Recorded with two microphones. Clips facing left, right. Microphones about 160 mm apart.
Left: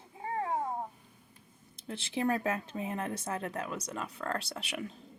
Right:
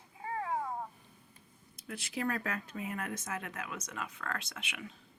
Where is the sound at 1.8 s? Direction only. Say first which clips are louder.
Left 4 dB; 25° left (ahead or behind).